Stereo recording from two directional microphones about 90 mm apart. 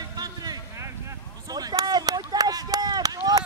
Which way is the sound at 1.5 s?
45° right (ahead or behind).